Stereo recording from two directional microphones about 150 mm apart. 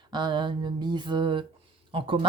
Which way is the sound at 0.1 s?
30° right (ahead or behind).